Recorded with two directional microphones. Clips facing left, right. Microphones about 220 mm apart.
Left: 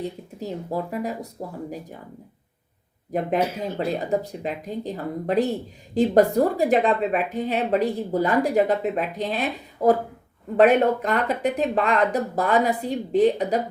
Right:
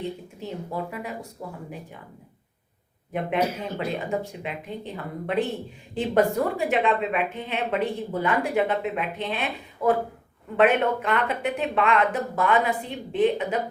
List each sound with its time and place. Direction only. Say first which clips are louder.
0.3 s speech: left 3 dB; 40° left (ahead or behind)
3.1 s speech: left 2 dB; 40° left (ahead or behind)